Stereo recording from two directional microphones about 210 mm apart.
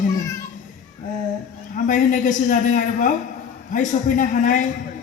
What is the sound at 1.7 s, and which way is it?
A man's voice, 40° left (ahead or behind).